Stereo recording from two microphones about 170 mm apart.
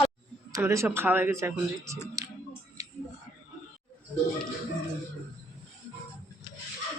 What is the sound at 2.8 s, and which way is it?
Whispering, 20° right (ahead or behind).